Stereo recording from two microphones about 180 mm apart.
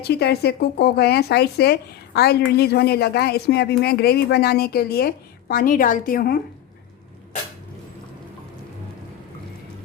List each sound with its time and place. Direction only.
0.0 s speech: 65° left (ahead or behind)